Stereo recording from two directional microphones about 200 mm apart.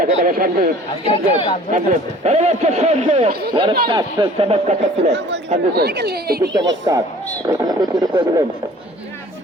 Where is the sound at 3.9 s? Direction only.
25° right (ahead or behind).